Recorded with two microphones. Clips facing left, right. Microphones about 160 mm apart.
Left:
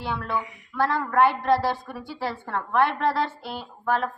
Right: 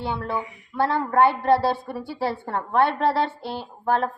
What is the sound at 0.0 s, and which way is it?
A woman's voice, 30° right (ahead or behind).